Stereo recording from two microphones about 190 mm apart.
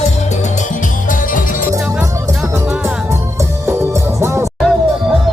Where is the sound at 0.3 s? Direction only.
40° left (ahead or behind).